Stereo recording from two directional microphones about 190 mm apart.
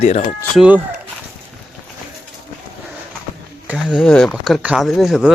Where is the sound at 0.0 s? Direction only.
35° left (ahead or behind).